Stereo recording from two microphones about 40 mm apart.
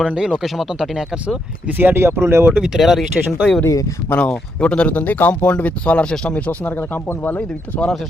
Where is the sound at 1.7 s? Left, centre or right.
Right.